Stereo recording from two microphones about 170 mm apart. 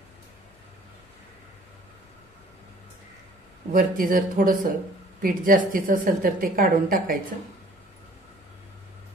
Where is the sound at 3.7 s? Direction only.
55° right (ahead or behind).